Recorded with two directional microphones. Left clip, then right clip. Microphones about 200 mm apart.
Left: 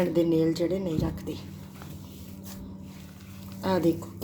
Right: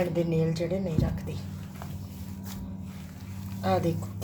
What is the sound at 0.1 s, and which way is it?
Speech, 45° left (ahead or behind).